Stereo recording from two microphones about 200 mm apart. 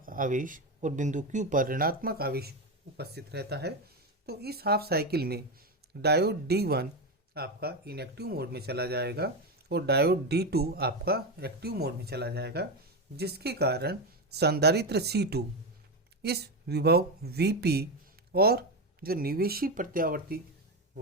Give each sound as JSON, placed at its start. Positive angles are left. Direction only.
{"t": 0.0, "sound": "speech", "side_deg": -45}